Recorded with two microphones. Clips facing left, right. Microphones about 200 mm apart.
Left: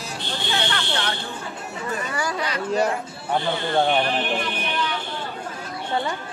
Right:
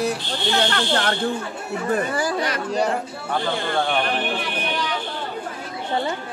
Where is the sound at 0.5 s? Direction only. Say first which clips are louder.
Right 5 dB; 55° right (ahead or behind).